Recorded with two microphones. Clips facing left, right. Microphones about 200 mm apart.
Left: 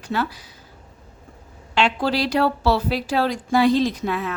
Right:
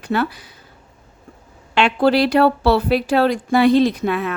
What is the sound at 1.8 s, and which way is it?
Speech, 60° right (ahead or behind).